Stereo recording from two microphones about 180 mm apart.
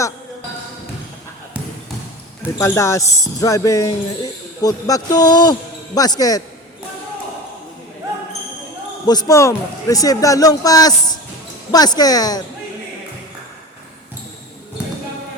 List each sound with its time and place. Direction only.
2.6 s a man's voice: 15° left (ahead or behind)
9.0 s a man's voice: 20° left (ahead or behind)